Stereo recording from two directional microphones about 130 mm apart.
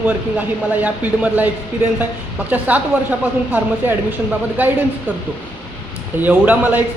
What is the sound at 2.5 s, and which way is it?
Speech, 10° right (ahead or behind).